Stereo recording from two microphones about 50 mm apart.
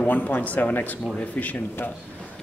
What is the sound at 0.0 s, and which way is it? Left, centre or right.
A man's voice, left.